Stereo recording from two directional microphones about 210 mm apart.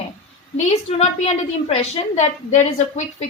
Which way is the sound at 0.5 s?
30° left (ahead or behind).